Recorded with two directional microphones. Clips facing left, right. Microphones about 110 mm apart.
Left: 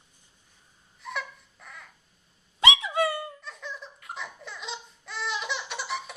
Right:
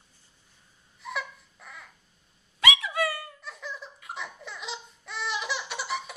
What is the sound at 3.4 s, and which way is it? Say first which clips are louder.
Laughter: even; centre (ahead or behind).